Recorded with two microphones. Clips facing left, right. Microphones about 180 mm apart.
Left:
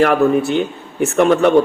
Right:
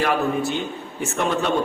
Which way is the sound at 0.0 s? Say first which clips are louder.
Left 8 dB; 65° left (ahead or behind).